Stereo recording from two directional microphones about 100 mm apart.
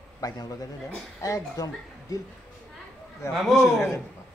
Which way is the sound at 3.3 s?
5° right (ahead or behind).